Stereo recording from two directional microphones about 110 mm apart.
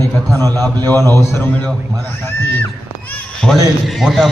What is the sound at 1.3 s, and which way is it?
Speech, 20° left (ahead or behind).